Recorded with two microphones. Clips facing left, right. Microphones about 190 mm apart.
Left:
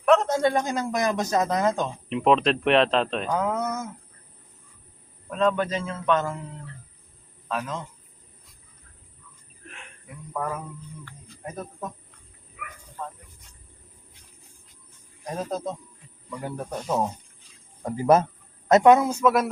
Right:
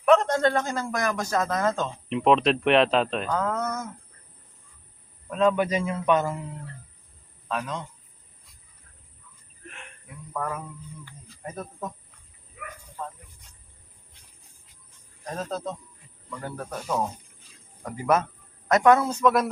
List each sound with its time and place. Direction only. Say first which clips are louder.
0.0 s a man's voice: even; centre (ahead or behind); by 1.9 s 15° left (ahead or behind)
2.0 s speech: even; centre (ahead or behind)
3.2 s a man's voice: left 1 dB; 15° left (ahead or behind)
5.3 s a man's voice: right 1 dB; 5° right (ahead or behind)
7.4 s a man's voice: even; centre (ahead or behind)
9.6 s a sound: right 1 dB; centre (ahead or behind)
10.3 s a man's voice: left 1 dB; 5° left (ahead or behind)
12.6 s a sound: right 1 dB; 30° right (ahead or behind)
15.2 s a man's voice: left 2 dB; 10° left (ahead or behind)
17.8 s speech: left 4 dB; 30° left (ahead or behind)
18.7 s a man's voice: left 3 dB; 20° left (ahead or behind)